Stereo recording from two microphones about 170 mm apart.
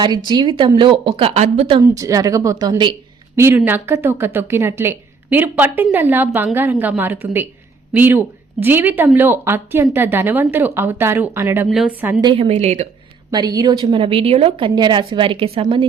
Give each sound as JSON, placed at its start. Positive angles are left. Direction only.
{"t": 0.0, "sound": "a woman's voice", "side_deg": -25}
{"t": 1.8, "sound": "a woman's voice", "side_deg": -20}
{"t": 3.3, "sound": "speech", "side_deg": -15}
{"t": 12.2, "sound": "speech", "side_deg": -30}
{"t": 13.3, "sound": "a woman's voice", "side_deg": -25}